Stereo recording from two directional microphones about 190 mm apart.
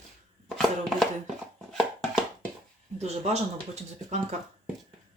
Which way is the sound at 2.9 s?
35° right (ahead or behind).